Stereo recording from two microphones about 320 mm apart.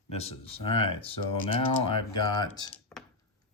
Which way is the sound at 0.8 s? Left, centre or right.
Centre.